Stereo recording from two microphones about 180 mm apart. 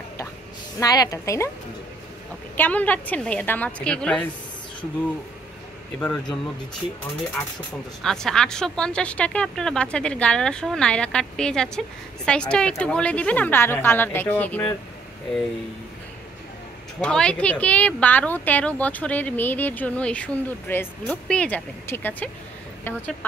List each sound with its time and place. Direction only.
0.7 s speech: 20° left (ahead or behind)
2.5 s speech: 10° left (ahead or behind)
5.9 s speech: 5° left (ahead or behind)
8.0 s speech: 5° left (ahead or behind)
17.0 s speech: 5° left (ahead or behind)